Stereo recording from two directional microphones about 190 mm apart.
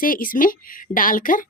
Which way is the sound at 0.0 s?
45° left (ahead or behind).